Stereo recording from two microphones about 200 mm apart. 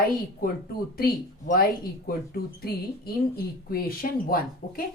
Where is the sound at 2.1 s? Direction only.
50° left (ahead or behind).